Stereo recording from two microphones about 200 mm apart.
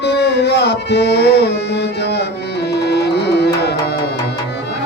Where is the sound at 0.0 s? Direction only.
55° left (ahead or behind).